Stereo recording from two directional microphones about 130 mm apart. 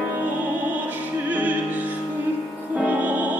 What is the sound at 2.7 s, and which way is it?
Music, 10° right (ahead or behind).